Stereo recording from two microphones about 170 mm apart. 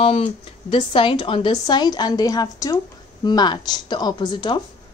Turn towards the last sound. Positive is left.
turn(degrees=25)  # may be behind; listen again after turning